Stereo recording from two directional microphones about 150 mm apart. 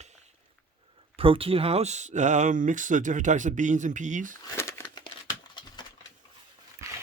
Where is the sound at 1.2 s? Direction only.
35° right (ahead or behind); by 4.3 s 55° right (ahead or behind).